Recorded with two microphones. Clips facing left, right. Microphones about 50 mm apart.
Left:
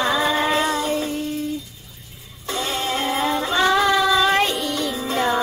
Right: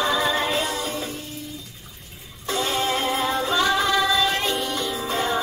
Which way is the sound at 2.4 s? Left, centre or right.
Centre.